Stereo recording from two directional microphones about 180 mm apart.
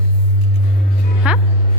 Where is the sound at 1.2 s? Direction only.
5° right (ahead or behind).